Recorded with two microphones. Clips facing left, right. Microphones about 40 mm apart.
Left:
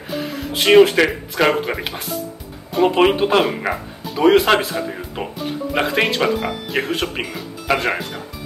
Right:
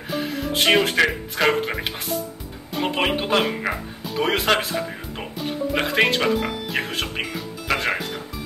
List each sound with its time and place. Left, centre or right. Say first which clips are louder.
0.1 s speech: even; centre